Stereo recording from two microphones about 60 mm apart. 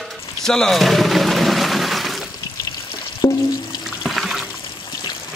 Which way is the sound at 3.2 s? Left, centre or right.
Left.